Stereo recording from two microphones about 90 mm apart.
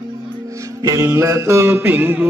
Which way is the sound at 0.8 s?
35° right (ahead or behind).